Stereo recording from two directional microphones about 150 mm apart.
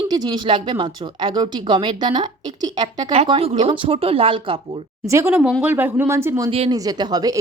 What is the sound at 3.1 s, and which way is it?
Speech, 40° right (ahead or behind).